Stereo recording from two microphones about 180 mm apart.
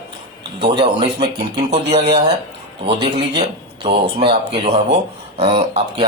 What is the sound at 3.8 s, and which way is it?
A man's voice, 35° right (ahead or behind).